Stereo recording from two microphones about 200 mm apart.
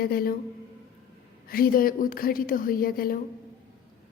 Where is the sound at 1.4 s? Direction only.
45° left (ahead or behind).